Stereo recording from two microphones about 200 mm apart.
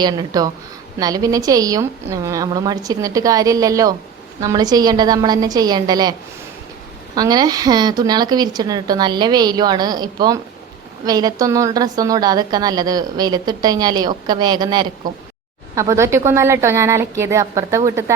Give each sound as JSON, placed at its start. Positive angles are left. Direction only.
{"t": 0.0, "sound": "a woman's voice", "side_deg": -20}
{"t": 7.2, "sound": "a woman's voice", "side_deg": -20}